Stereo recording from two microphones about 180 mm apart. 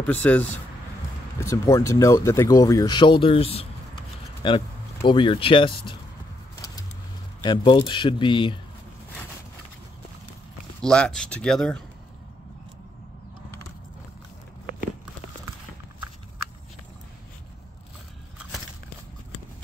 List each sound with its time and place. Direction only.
0.0 s speech: 10° left (ahead or behind); by 5.9 s 30° left (ahead or behind)
7.4 s speech: 25° left (ahead or behind)
10.8 s speech: 5° left (ahead or behind)